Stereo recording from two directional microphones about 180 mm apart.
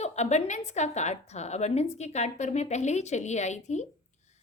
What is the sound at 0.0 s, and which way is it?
A woman's voice, 40° left (ahead or behind).